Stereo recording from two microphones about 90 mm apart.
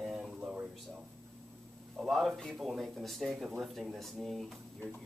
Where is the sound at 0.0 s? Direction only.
5° right (ahead or behind).